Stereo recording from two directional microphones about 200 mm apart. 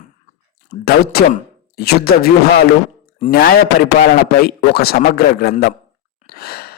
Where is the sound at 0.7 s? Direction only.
50° left (ahead or behind).